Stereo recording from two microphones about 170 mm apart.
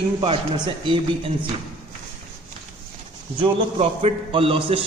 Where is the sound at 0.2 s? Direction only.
25° right (ahead or behind).